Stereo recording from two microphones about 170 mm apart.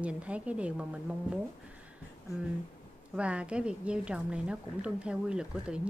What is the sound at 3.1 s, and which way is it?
A woman's voice, 5° right (ahead or behind).